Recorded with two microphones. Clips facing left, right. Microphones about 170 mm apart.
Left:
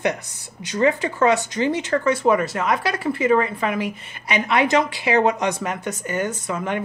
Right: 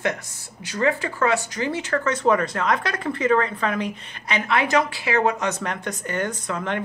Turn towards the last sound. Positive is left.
turn(degrees=10)  # may be behind; listen again after turning